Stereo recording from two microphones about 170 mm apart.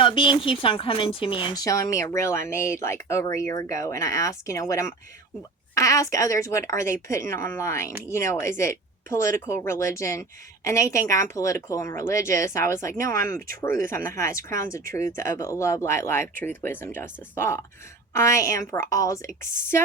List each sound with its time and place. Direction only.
0.0 s a woman's voice: 30° left (ahead or behind)